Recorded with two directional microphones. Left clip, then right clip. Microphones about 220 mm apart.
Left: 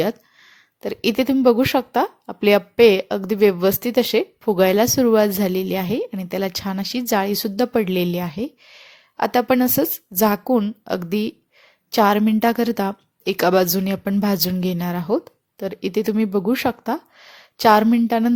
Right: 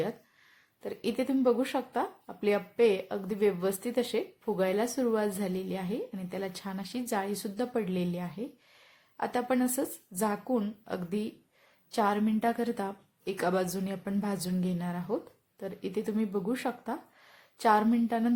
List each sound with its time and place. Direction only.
0.8 s a woman's voice: 35° left (ahead or behind)